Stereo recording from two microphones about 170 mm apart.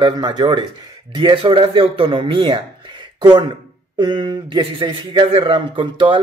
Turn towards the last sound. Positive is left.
turn(degrees=-30)  # may be behind; listen again after turning